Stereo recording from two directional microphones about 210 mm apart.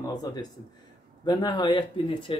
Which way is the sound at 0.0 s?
20° left (ahead or behind).